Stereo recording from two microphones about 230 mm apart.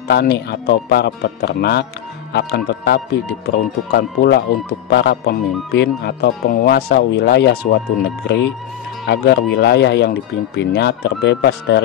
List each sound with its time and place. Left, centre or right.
0.1 s speech: left